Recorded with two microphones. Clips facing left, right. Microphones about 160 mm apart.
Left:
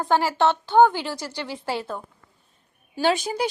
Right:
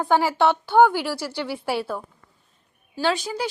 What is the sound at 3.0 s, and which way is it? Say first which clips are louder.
Speech: left 2 dB; 20° left (ahead or behind).